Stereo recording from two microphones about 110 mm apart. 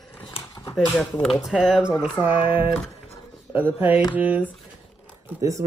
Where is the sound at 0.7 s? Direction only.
5° left (ahead or behind).